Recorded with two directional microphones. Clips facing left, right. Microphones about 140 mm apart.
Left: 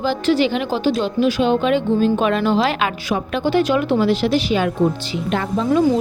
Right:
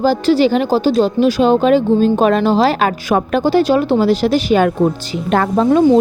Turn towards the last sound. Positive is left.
turn(degrees=-50)  # may be behind; listen again after turning